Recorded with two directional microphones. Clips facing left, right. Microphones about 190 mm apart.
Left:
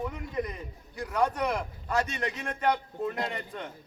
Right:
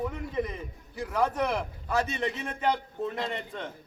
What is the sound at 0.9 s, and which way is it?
A man's voice, 5° right (ahead or behind).